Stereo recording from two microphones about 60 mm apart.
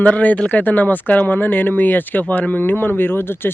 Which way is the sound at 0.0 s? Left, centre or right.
Left.